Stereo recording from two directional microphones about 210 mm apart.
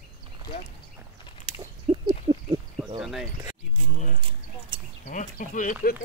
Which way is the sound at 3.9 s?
35° left (ahead or behind).